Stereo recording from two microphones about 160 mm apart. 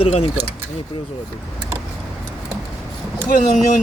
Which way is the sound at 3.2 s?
55° left (ahead or behind).